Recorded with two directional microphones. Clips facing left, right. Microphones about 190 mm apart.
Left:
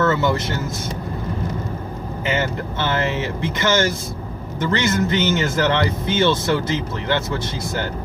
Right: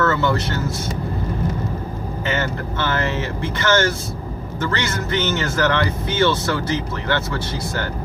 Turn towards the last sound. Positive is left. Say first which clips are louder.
# even
turn(degrees=20)  # may be behind; listen again after turning